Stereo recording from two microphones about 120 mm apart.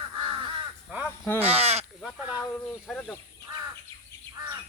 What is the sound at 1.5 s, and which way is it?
Speech, 60° right (ahead or behind).